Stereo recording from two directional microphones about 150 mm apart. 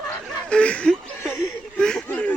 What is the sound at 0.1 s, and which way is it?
Snicker, 10° left (ahead or behind).